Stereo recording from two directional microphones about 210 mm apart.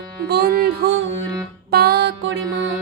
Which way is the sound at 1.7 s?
50° right (ahead or behind).